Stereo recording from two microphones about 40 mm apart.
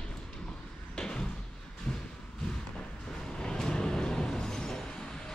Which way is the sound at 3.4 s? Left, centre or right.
Centre.